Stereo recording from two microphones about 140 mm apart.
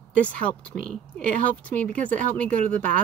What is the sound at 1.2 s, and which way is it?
Speech, 70° right (ahead or behind).